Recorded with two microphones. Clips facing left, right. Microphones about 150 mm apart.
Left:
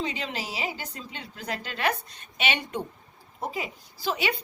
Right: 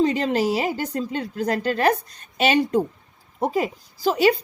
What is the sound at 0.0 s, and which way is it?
A woman's voice, 45° right (ahead or behind).